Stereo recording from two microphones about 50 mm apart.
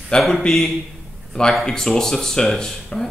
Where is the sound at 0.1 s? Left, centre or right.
Centre.